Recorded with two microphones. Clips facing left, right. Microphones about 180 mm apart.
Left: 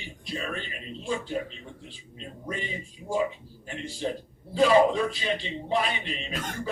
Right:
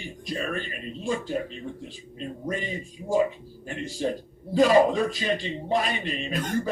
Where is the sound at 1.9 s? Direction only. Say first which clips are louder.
Right 7 dB; 45° right (ahead or behind).